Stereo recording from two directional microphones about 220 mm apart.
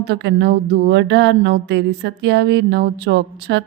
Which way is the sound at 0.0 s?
50° right (ahead or behind).